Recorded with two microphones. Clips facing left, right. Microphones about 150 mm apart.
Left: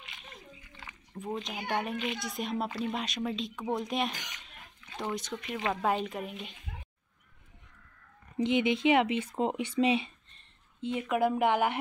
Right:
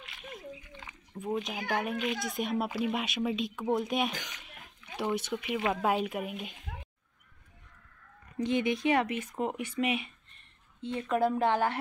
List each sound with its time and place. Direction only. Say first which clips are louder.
0.0 s a sound: right 5 dB; centre (ahead or behind)
1.1 s speech: right 3 dB; centre (ahead or behind)
8.4 s speech: left 2 dB; 20° left (ahead or behind)
10.8 s speech: even; 15° left (ahead or behind)